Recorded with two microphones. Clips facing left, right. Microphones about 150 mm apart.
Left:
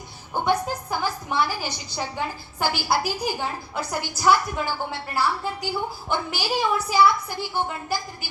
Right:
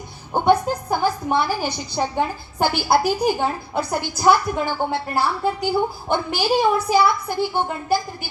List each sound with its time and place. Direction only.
0.3 s a woman's voice: 50° right (ahead or behind)